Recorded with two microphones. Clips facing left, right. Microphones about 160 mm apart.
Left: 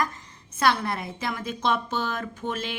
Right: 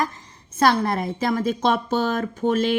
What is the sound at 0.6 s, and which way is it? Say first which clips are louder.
A woman's voice: right 5 dB; 40° right (ahead or behind).